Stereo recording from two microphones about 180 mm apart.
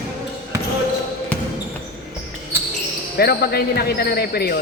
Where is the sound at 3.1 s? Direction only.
60° left (ahead or behind).